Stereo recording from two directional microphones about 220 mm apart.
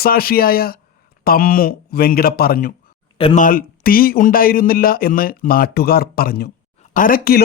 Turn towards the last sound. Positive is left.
turn(degrees=40)  # may be behind; listen again after turning